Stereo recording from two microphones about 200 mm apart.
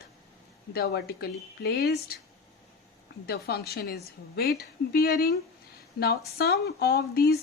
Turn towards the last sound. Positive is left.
turn(degrees=50)  # may be behind; listen again after turning